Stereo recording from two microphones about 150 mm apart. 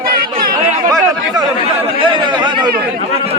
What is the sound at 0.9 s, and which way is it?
Chatter, 25° right (ahead or behind).